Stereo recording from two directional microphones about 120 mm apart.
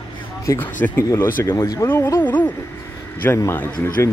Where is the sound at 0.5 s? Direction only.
25° left (ahead or behind).